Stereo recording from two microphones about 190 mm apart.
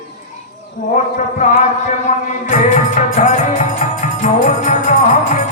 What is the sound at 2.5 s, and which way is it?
Music, 45° left (ahead or behind).